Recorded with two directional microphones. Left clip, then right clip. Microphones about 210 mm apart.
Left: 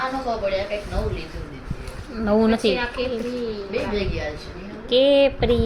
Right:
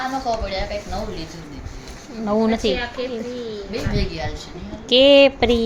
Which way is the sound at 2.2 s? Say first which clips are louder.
Left 1 dB; centre (ahead or behind).